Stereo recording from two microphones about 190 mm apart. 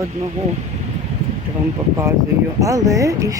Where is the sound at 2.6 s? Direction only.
15° right (ahead or behind).